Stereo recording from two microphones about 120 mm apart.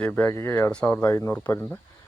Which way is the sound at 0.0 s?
15° left (ahead or behind).